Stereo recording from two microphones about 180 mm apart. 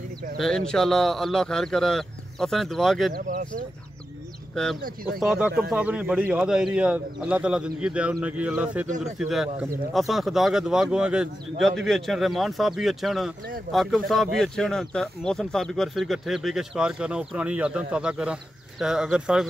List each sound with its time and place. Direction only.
0.4 s speech: 5° left (ahead or behind)
3.1 s speech: 50° right (ahead or behind)
5.2 s speech: 5° right (ahead or behind)
8.8 s speech: 45° right (ahead or behind)
9.2 s speech: 5° right (ahead or behind)